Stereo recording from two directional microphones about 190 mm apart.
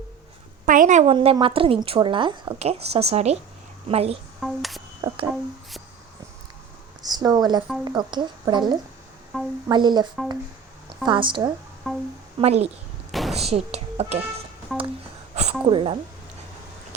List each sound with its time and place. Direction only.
0.6 s a woman's voice: 45° right (ahead or behind)
1.1 s a woman's voice: 30° right (ahead or behind)
4.4 s speech: centre (ahead or behind)
7.0 s a woman's voice: 20° right (ahead or behind)
9.3 s a woman's voice: centre (ahead or behind)
9.6 s a woman's voice: 25° right (ahead or behind)
11.9 s a woman's voice: centre (ahead or behind)
12.4 s speech: 35° right (ahead or behind)
13.1 s a sound: centre (ahead or behind)
13.4 s speech: 35° right (ahead or behind)
14.7 s a woman's voice: centre (ahead or behind)
15.4 s speech: 35° right (ahead or behind)